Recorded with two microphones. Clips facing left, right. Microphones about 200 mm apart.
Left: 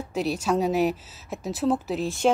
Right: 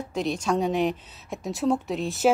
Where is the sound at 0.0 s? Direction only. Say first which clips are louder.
Left 1 dB; 5° left (ahead or behind).